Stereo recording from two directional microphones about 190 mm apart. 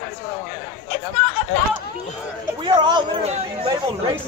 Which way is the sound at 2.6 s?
25° right (ahead or behind).